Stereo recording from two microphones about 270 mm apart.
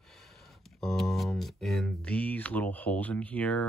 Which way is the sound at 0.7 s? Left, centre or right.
Centre.